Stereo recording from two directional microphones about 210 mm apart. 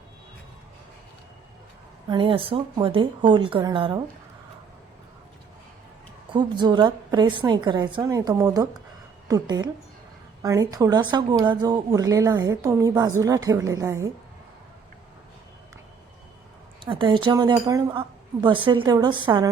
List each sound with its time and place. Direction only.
2.0 s speech: 25° right (ahead or behind)
6.3 s a woman's voice: 20° right (ahead or behind)
16.8 s speech: 25° right (ahead or behind)